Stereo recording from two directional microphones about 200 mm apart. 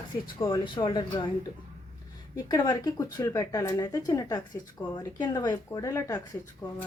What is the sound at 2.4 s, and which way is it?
Speech, 20° left (ahead or behind).